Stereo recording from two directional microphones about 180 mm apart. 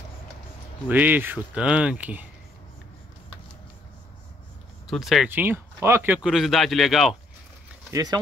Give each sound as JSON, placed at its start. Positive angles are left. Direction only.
{"t": 0.8, "sound": "speech", "side_deg": -10}
{"t": 4.8, "sound": "speech", "side_deg": 0}
{"t": 5.3, "sound": "speech", "side_deg": -10}
{"t": 7.9, "sound": "speech", "side_deg": -20}